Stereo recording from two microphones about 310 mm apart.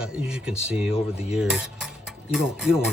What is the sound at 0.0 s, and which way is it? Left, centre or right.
Speech, centre.